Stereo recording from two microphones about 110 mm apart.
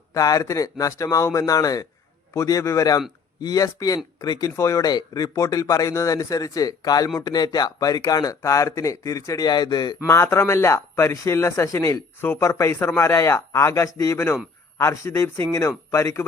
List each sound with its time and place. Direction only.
0.1 s a man's voice: 35° left (ahead or behind)
10.1 s a man's voice: 25° left (ahead or behind)